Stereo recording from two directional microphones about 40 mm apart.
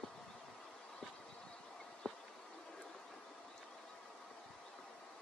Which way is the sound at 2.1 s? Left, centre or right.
Centre.